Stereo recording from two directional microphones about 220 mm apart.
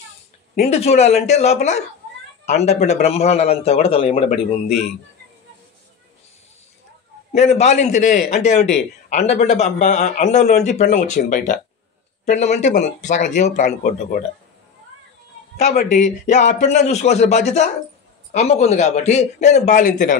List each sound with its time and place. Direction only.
0.6 s a man's voice: 30° left (ahead or behind)
7.3 s speech: 30° left (ahead or behind)
15.5 s speech: 30° left (ahead or behind)